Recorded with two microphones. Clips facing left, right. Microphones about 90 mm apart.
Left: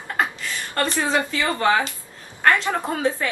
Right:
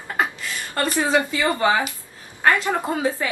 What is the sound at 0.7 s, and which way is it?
A woman's voice, 15° right (ahead or behind).